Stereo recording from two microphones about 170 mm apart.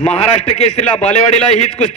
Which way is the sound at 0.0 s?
40° left (ahead or behind).